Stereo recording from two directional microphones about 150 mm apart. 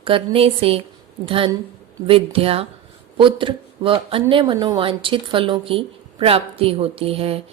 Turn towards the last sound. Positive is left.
turn(degrees=-40)  # may be behind; listen again after turning